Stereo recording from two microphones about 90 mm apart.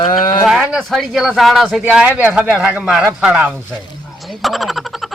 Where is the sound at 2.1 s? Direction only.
25° right (ahead or behind).